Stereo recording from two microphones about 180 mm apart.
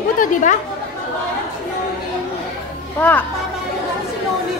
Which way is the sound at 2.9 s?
10° left (ahead or behind).